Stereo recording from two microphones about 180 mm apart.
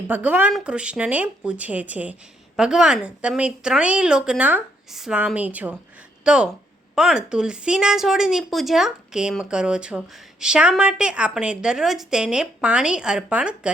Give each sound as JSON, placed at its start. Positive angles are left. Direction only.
{"t": 0.1, "sound": "a woman's voice", "side_deg": -10}